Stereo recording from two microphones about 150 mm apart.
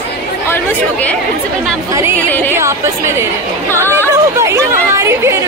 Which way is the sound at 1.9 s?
20° right (ahead or behind).